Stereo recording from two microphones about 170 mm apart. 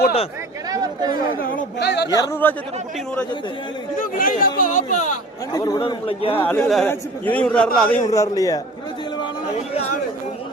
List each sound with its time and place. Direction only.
0.7 s speech: 25° right (ahead or behind)
1.4 s speech: 65° left (ahead or behind)
2.1 s a man's voice: 15° left (ahead or behind)
4.2 s speech: 55° left (ahead or behind)
5.5 s a man's voice: 20° left (ahead or behind)
5.8 s a man's voice: 35° left (ahead or behind)
6.4 s a man's voice: 10° left (ahead or behind)
8.1 s a man's voice: 20° left (ahead or behind)